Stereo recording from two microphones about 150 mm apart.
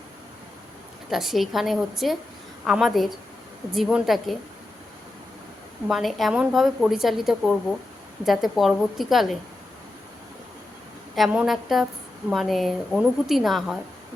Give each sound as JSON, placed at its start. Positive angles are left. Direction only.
{"t": 1.1, "sound": "a woman's voice", "side_deg": 0}
{"t": 5.9, "sound": "a woman's voice", "side_deg": 0}
{"t": 11.1, "sound": "a woman's voice", "side_deg": -5}